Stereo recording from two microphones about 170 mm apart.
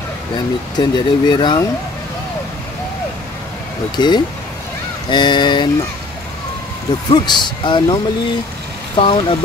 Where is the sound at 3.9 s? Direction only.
25° left (ahead or behind).